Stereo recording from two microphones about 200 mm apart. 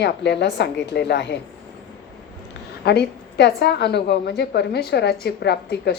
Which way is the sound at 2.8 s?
55° left (ahead or behind).